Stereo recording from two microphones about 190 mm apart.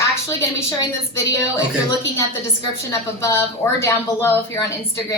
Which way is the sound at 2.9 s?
15° left (ahead or behind).